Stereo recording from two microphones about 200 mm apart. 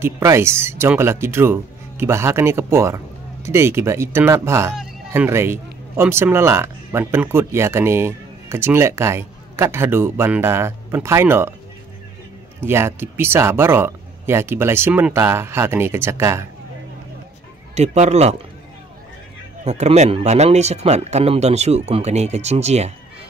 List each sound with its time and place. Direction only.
0.0 s speech: 15° right (ahead or behind)
12.5 s speech: 10° right (ahead or behind)
17.7 s speech: 35° right (ahead or behind)
19.6 s speech: 35° right (ahead or behind)